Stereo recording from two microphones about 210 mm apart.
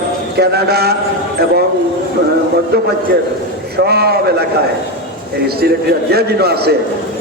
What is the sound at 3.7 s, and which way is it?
Speech, 50° right (ahead or behind).